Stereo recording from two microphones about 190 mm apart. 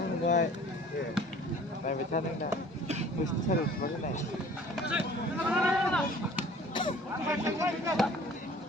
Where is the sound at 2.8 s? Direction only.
35° right (ahead or behind).